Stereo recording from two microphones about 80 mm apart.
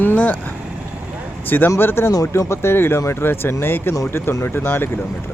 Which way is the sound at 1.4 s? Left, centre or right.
Left.